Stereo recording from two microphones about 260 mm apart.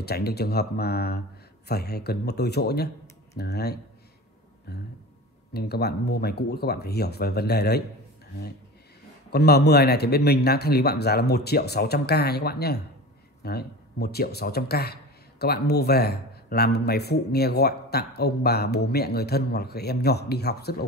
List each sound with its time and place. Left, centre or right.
0.0 s a man's voice: left
9.3 s a man's voice: left